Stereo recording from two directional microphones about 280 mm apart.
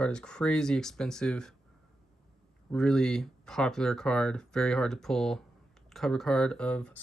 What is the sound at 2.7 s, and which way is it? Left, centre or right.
Speech, centre.